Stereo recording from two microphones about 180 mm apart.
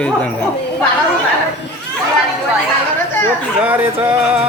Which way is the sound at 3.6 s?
10° right (ahead or behind).